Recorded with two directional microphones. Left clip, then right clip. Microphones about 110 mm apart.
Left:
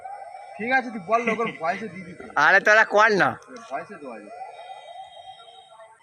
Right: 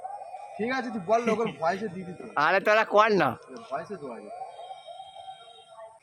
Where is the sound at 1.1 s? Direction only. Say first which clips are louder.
Left 2 dB; 15° right (ahead or behind).